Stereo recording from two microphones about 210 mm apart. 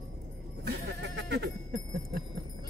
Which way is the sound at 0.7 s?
55° right (ahead or behind).